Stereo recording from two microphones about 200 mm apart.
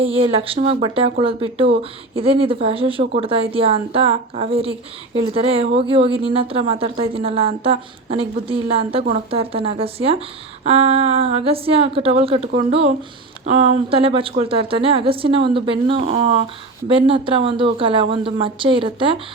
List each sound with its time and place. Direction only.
0.0 s a woman's voice: 30° right (ahead or behind)